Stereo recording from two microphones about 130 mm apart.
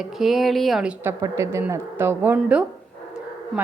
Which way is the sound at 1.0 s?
20° right (ahead or behind).